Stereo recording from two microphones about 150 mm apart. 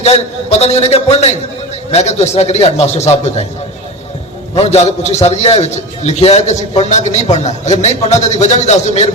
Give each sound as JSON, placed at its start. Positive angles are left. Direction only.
{"t": 0.0, "sound": "a man's voice", "side_deg": 45}
{"t": 4.5, "sound": "a man's voice", "side_deg": 45}